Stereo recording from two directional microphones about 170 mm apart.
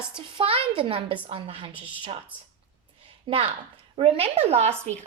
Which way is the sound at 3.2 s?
30° right (ahead or behind).